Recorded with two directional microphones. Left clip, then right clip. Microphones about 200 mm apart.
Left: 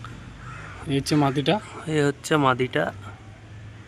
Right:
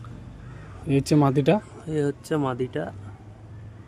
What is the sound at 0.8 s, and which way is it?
Speech, 35° right (ahead or behind).